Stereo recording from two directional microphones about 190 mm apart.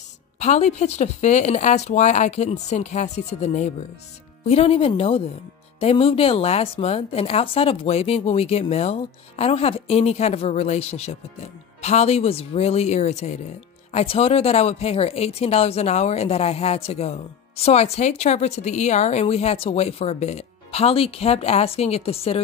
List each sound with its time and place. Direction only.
0.4 s a woman's voice: 35° left (ahead or behind)